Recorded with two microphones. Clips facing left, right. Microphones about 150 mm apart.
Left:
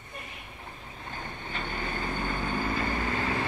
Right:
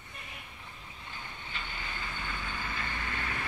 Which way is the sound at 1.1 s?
45° left (ahead or behind).